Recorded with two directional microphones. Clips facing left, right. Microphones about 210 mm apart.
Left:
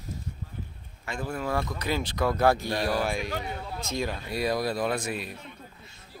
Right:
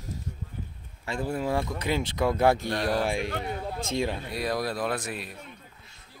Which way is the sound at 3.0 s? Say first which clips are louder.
Right 1 dB; 25° right (ahead or behind).